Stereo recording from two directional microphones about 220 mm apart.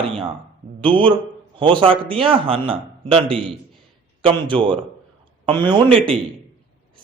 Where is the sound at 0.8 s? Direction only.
25° right (ahead or behind).